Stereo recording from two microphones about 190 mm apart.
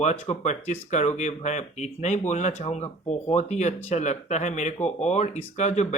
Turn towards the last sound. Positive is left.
turn(degrees=35)  # may be behind; listen again after turning